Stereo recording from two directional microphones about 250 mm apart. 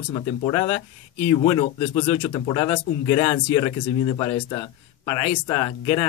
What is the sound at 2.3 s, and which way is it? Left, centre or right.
Speech, centre.